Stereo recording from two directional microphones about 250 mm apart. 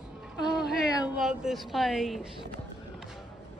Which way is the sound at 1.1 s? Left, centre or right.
Centre.